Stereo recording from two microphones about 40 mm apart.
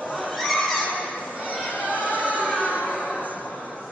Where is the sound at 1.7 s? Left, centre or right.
Left.